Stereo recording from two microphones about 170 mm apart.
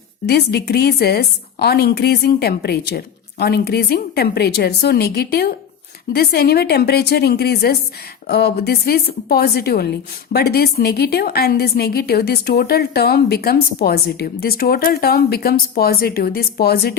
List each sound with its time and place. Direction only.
0.3 s a woman's voice: 70° left (ahead or behind)